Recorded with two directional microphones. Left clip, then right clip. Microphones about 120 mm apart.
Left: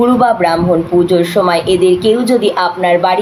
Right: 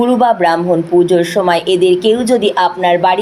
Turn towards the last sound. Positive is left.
turn(degrees=-35)  # may be behind; listen again after turning